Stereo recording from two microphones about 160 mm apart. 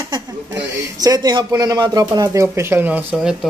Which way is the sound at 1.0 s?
25° right (ahead or behind).